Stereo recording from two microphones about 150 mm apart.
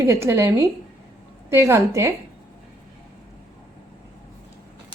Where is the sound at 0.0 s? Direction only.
20° right (ahead or behind).